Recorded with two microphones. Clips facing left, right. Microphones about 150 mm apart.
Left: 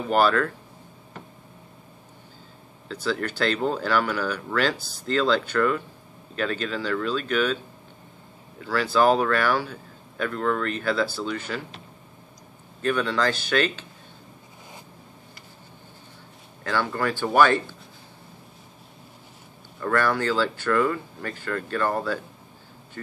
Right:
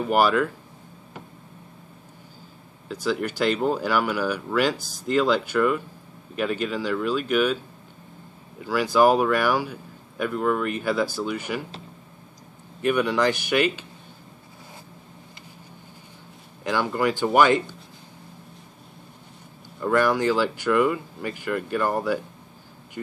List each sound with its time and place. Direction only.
0.1 s speech: 10° right (ahead or behind)
2.9 s speech: 10° right (ahead or behind)
8.6 s speech: 15° right (ahead or behind)
12.8 s speech: 15° right (ahead or behind)
16.6 s speech: 15° right (ahead or behind)
19.8 s speech: 15° right (ahead or behind)